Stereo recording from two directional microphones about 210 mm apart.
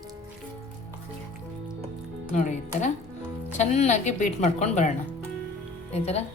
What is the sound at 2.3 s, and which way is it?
A woman's voice, 35° left (ahead or behind).